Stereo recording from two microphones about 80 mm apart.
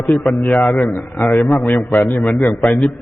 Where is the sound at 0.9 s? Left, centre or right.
Left.